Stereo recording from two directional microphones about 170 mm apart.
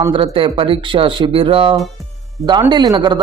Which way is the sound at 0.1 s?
30° right (ahead or behind).